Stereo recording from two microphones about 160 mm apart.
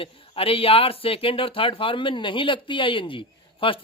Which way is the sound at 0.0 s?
35° left (ahead or behind).